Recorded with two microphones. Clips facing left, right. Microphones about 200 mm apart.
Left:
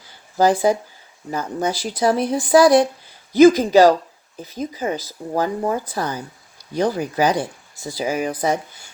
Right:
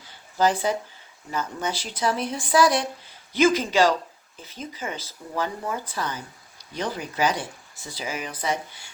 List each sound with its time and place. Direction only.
0.3 s speech: 35° left (ahead or behind)